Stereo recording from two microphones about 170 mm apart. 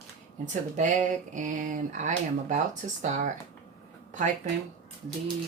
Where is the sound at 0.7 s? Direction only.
45° right (ahead or behind).